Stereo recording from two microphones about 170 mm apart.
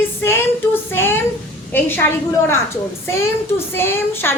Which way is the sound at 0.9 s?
15° left (ahead or behind).